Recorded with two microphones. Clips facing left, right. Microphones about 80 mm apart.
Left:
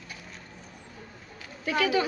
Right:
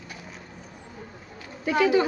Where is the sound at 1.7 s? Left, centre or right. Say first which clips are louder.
Right 5 dB; right.